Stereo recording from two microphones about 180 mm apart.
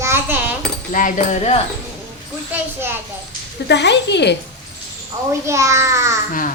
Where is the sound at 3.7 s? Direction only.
75° left (ahead or behind).